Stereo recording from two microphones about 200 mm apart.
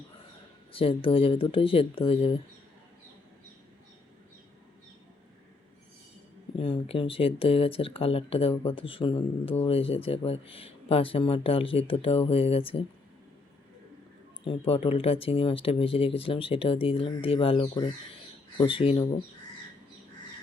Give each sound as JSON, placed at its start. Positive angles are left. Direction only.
{"t": 0.7, "sound": "speech", "side_deg": 25}
{"t": 6.6, "sound": "speech", "side_deg": 25}
{"t": 14.4, "sound": "speech", "side_deg": 30}